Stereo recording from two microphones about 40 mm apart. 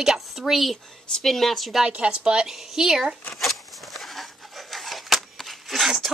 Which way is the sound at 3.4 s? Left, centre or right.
Centre.